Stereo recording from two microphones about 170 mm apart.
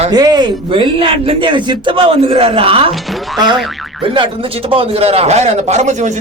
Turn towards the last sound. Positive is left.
turn(degrees=-45)  # may be behind; listen again after turning